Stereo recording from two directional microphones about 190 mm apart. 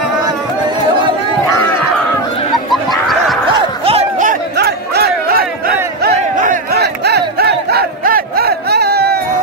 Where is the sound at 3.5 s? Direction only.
25° right (ahead or behind); by 6.8 s 50° right (ahead or behind).